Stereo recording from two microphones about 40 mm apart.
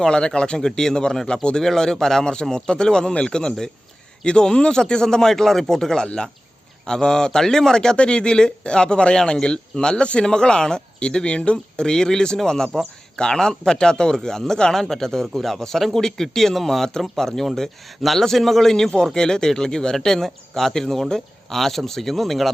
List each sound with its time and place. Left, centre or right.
0.0 s a man's voice: centre
2.2 s a man's voice: centre